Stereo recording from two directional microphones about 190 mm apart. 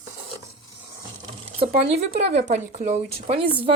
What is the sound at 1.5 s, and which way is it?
Speech, 30° right (ahead or behind).